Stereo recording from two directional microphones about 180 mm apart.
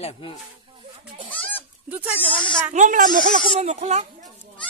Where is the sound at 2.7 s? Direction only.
45° right (ahead or behind).